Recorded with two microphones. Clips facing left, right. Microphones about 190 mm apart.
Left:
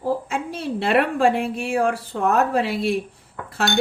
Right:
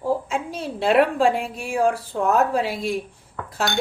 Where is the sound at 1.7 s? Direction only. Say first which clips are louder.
Right 3 dB; 60° left (ahead or behind).